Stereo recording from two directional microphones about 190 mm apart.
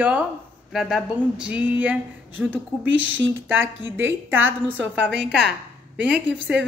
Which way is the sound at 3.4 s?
10° right (ahead or behind).